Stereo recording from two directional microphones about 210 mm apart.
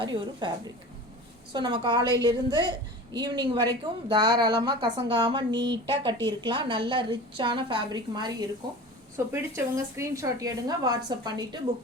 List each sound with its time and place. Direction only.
0.0 s a woman's voice: 20° right (ahead or behind)